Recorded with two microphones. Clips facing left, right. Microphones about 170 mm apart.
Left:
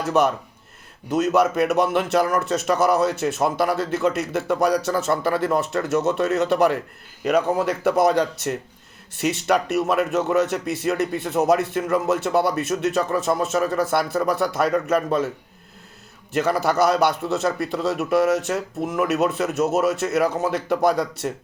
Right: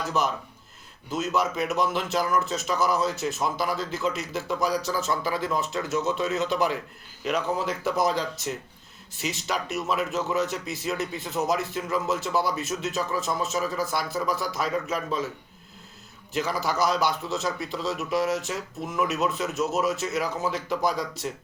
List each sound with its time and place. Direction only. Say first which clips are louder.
0.1 s speech: left 10 dB; 60° left (ahead or behind)
16.3 s speech: left 7 dB; 55° left (ahead or behind)